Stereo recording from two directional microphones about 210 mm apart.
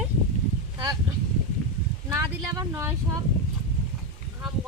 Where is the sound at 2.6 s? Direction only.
10° right (ahead or behind).